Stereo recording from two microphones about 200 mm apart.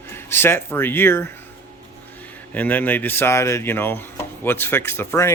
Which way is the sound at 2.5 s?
10° left (ahead or behind).